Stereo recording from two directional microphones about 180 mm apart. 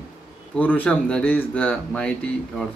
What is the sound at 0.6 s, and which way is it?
Speech, 10° left (ahead or behind).